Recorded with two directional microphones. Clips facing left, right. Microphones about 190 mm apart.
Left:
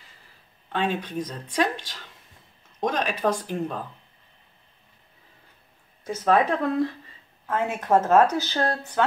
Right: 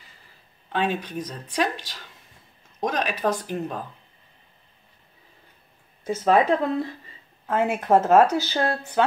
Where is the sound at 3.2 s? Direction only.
5° right (ahead or behind).